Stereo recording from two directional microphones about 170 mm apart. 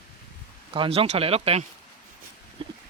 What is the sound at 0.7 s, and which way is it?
Speech, 30° right (ahead or behind).